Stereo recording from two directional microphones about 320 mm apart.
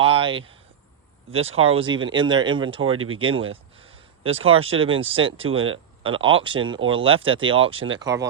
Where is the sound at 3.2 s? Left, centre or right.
Centre.